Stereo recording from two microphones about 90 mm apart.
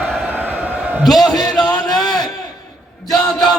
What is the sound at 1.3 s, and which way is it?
Speech, 50° left (ahead or behind).